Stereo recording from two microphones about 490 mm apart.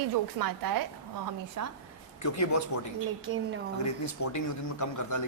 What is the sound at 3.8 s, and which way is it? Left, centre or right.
Speech, left.